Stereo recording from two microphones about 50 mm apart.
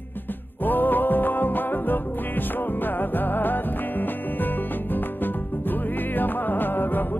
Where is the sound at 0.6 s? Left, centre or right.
Left.